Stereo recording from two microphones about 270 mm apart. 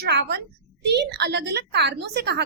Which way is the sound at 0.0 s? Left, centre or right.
Right.